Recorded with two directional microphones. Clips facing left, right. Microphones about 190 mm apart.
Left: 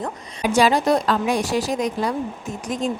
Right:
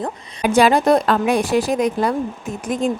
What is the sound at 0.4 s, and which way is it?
A woman's voice, 55° right (ahead or behind).